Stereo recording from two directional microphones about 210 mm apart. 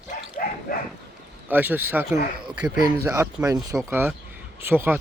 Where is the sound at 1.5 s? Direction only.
10° right (ahead or behind).